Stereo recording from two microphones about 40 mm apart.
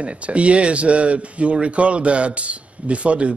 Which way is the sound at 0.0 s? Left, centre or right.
Right.